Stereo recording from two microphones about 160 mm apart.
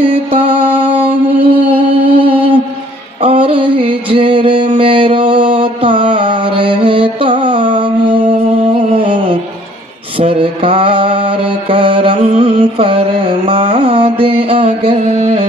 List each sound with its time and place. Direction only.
0.0 s mantra: 35° right (ahead or behind)
3.4 s music: 35° right (ahead or behind)
5.3 s mantra: 30° right (ahead or behind)
8.9 s a sound: 35° right (ahead or behind)
10.1 s mantra: 35° right (ahead or behind)
14.2 s music: 35° right (ahead or behind)